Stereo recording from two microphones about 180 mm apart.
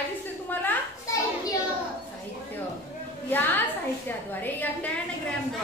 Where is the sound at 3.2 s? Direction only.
10° left (ahead or behind).